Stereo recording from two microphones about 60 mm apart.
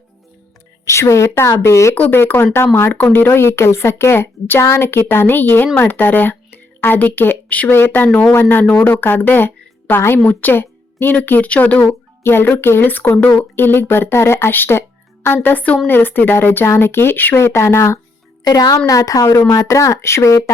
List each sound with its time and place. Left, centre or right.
0.9 s speech: left
2.0 s speech: left
3.2 s speech: left
7.8 s a woman's voice: left
12.2 s speech: left
15.4 s a woman's voice: left
18.9 s speech: left